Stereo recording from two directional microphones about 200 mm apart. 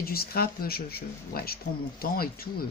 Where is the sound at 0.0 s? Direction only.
50° left (ahead or behind).